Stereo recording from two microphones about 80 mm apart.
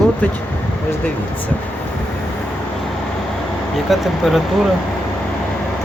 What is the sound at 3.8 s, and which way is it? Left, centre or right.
Speech, centre.